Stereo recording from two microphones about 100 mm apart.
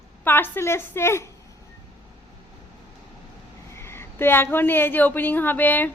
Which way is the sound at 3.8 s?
25° left (ahead or behind).